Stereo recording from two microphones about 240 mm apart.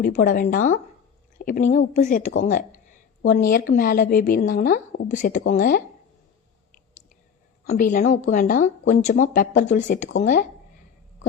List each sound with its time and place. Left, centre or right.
0.0 s speech: left
2.4 s a sound: left
3.5 s speech: left
7.7 s speech: left